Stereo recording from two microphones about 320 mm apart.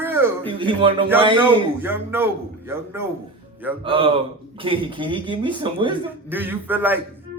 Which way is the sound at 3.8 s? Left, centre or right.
Centre.